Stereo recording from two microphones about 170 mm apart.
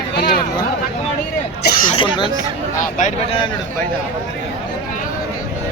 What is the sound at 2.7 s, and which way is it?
Speech, 50° left (ahead or behind).